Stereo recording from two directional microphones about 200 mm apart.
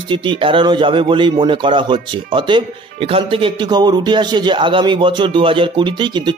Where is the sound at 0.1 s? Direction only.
25° right (ahead or behind).